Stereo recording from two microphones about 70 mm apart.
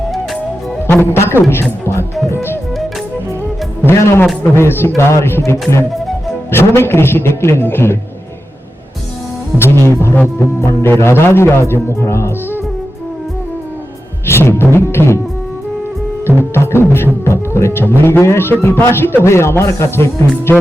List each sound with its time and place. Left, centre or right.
0.9 s a man's voice: left
2.3 s music: left
3.8 s a man's voice: left
6.5 s a man's voice: left
9.6 s a man's voice: left
14.3 s a man's voice: left
16.6 s music: left
17.2 s a man's voice: left